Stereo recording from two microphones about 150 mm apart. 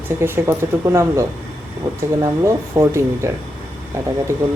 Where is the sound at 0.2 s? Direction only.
15° right (ahead or behind).